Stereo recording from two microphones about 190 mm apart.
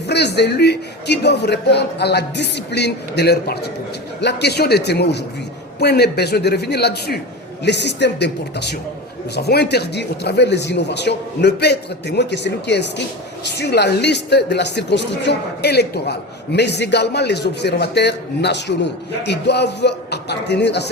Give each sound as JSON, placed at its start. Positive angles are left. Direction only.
{"t": 0.1, "sound": "speech", "side_deg": 60}